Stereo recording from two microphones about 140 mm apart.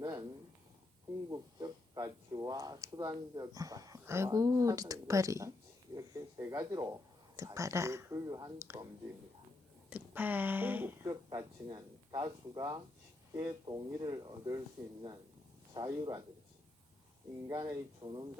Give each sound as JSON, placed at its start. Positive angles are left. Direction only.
{"t": 0.0, "sound": "a sound", "side_deg": -30}
{"t": 1.3, "sound": "speech", "side_deg": -25}
{"t": 9.9, "sound": "speech", "side_deg": -10}
{"t": 11.0, "sound": "speech", "side_deg": -25}
{"t": 14.8, "sound": "speech", "side_deg": -15}
{"t": 15.7, "sound": "speech", "side_deg": -30}
{"t": 17.5, "sound": "speech", "side_deg": -30}